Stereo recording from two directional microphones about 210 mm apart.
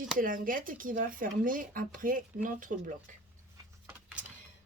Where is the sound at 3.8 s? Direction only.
5° right (ahead or behind).